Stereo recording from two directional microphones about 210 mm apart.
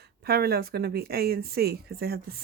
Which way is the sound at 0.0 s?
50° right (ahead or behind).